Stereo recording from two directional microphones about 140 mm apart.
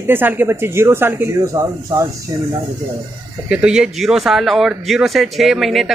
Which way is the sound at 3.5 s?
5° right (ahead or behind).